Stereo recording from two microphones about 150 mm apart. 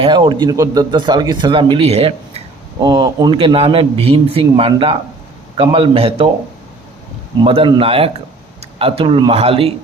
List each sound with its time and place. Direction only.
0.0 s a man's voice: 30° right (ahead or behind)
2.7 s a man's voice: 30° right (ahead or behind)
7.4 s a man's voice: 40° right (ahead or behind)